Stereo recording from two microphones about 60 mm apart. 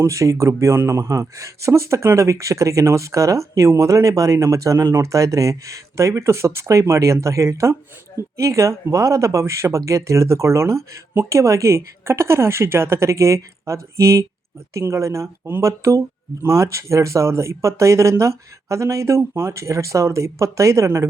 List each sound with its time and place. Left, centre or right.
0.0 s speech: right